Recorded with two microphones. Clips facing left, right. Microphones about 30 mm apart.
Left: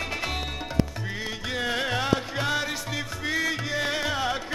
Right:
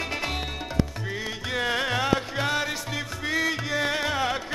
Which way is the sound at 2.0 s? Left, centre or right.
Centre.